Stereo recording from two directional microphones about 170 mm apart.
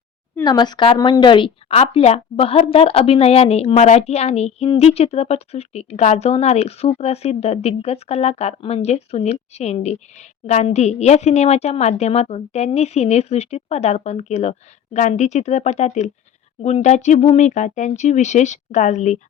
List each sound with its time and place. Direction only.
0.4 s speech: 25° left (ahead or behind); by 19.2 s 45° left (ahead or behind)